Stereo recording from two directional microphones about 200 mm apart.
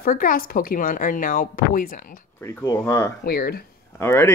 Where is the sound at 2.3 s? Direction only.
10° left (ahead or behind).